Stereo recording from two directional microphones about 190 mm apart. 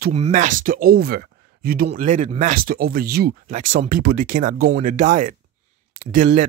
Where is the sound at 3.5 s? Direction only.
45° right (ahead or behind).